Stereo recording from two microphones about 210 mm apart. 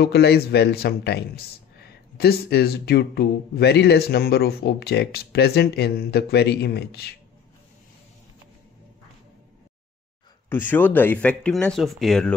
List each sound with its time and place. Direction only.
0.0 s a man's voice: 50° left (ahead or behind)
10.5 s speech: 10° left (ahead or behind)